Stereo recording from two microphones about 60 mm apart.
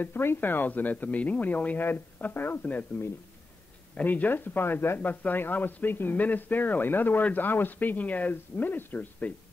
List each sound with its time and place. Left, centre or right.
0.0 s speech: left
3.9 s speech: left